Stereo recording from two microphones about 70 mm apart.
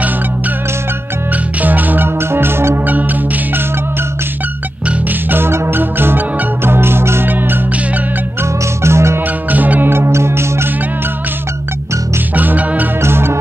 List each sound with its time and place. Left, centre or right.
1.3 s music: right
4.8 s music: right
8.4 s music: right
9.2 s music: right
12.4 s music: right
13.0 s music: right